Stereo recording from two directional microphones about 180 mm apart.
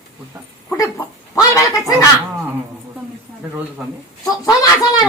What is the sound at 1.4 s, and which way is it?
Speech, 20° left (ahead or behind).